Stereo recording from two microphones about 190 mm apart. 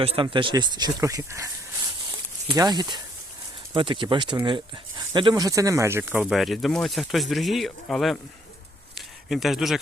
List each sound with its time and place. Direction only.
0.0 s speech: 30° right (ahead or behind)
2.5 s speech: 20° right (ahead or behind); by 9.8 s centre (ahead or behind)